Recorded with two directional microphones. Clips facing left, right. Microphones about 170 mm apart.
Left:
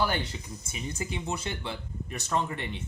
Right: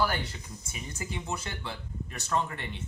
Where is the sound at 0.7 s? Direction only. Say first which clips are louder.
Left 4 dB; 20° left (ahead or behind).